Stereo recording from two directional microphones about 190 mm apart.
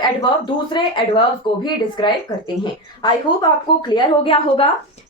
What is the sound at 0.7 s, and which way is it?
A woman's voice, 25° left (ahead or behind).